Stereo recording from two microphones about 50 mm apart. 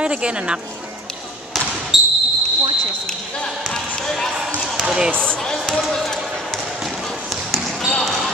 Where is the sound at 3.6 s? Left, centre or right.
Centre.